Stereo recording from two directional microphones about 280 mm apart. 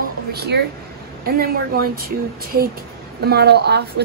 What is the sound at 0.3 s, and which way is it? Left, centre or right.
A woman's voice, right.